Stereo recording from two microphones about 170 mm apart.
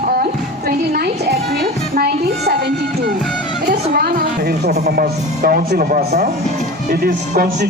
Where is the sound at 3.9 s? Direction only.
60° right (ahead or behind).